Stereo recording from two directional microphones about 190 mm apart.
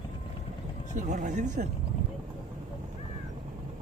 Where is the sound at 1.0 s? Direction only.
40° right (ahead or behind).